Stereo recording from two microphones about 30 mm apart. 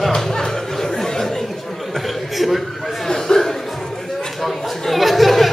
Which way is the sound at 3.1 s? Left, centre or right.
Centre.